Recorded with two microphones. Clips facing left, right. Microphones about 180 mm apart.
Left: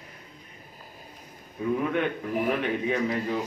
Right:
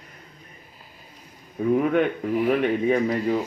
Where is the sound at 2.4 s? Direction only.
45° right (ahead or behind).